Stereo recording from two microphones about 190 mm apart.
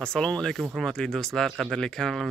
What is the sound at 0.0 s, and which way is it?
Speech, 5° left (ahead or behind).